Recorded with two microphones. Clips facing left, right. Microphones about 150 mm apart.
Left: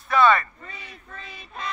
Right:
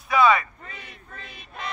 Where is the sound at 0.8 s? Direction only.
50° right (ahead or behind).